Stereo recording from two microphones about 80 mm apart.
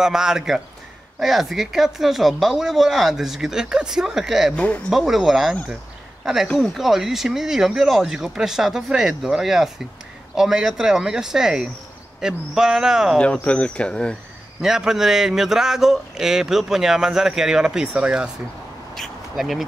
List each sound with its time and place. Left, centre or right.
0.0 s a man's voice: centre
4.6 s speech: centre
4.9 s speech: centre
6.4 s speech: centre
6.7 s a man's voice: centre
13.4 s speech: centre
14.6 s a man's voice: centre
18.9 s quack: centre